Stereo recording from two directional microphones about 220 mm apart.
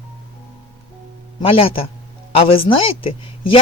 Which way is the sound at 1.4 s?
25° left (ahead or behind).